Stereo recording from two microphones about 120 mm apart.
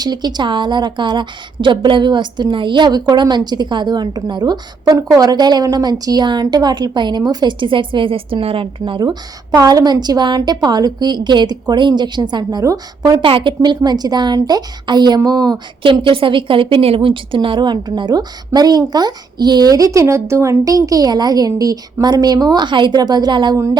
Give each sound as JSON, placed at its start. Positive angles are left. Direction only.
{"t": 0.0, "sound": "speech", "side_deg": -35}
{"t": 13.1, "sound": "speech", "side_deg": -45}